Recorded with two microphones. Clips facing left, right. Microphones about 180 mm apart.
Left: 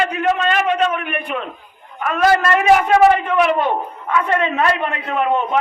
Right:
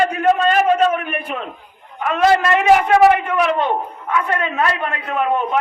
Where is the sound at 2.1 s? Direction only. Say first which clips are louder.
Even; 20° right (ahead or behind).